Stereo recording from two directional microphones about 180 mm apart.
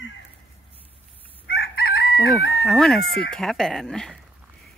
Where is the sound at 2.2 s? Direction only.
Centre (ahead or behind).